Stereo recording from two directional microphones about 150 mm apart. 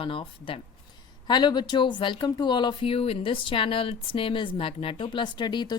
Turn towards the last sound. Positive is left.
turn(degrees=30)  # may be behind; listen again after turning